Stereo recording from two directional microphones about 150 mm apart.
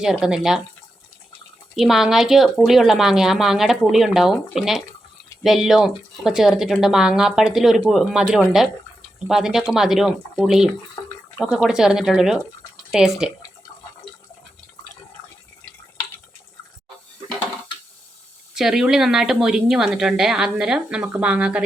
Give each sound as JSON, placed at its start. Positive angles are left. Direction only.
{"t": 0.0, "sound": "a woman's voice", "side_deg": -5}
{"t": 1.7, "sound": "a woman's voice", "side_deg": 0}
{"t": 11.0, "sound": "bathtub", "side_deg": 25}
{"t": 11.3, "sound": "a woman's voice", "side_deg": 0}
{"t": 18.5, "sound": "a woman's voice", "side_deg": 0}